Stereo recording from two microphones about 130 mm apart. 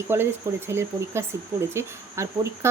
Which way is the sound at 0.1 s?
20° right (ahead or behind).